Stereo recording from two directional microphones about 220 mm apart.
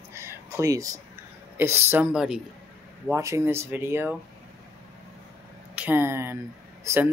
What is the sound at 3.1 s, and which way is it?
Speech, 15° right (ahead or behind).